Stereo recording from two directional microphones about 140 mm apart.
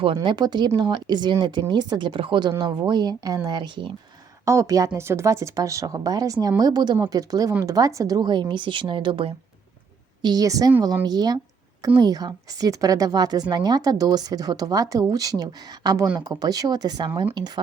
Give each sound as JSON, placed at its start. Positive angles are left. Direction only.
{"t": 0.0, "sound": "speech", "side_deg": -35}
{"t": 4.4, "sound": "a woman's voice", "side_deg": -20}
{"t": 10.2, "sound": "a woman's voice", "side_deg": -25}